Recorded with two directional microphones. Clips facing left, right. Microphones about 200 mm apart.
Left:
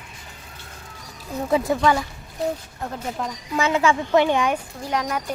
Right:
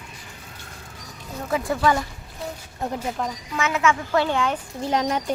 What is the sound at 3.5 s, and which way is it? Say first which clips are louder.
Speech: left 3 dB; 30° left (ahead or behind).